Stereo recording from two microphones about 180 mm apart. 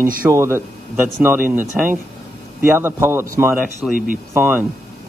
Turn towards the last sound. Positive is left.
turn(degrees=-10)  # may be behind; listen again after turning